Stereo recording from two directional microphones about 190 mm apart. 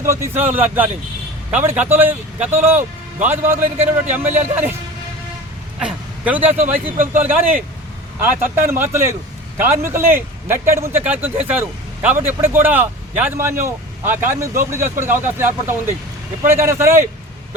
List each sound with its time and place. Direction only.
0.0 s speech: 15° right (ahead or behind)
5.8 s speech: 5° right (ahead or behind)
6.5 s speech: 30° right (ahead or behind)
7.0 s speech: 10° right (ahead or behind)
8.7 s speech: 10° right (ahead or behind)